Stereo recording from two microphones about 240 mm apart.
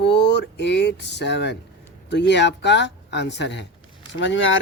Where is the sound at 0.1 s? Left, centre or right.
Left.